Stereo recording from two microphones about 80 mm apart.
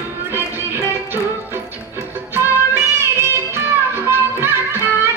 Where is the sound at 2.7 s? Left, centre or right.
Right.